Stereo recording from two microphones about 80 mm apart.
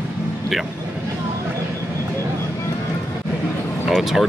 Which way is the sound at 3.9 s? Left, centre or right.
Centre.